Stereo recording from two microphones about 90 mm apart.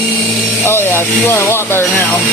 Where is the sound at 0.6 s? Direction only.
25° left (ahead or behind).